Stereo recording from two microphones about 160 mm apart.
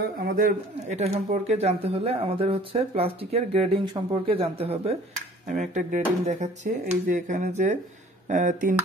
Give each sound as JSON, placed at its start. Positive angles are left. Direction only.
{"t": 0.2, "sound": "speech", "side_deg": -60}
{"t": 5.5, "sound": "speech", "side_deg": -55}